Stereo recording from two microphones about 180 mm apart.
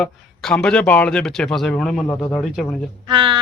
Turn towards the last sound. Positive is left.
turn(degrees=-25)  # may be behind; listen again after turning